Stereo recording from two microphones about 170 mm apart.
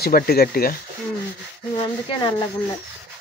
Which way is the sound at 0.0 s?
65° left (ahead or behind).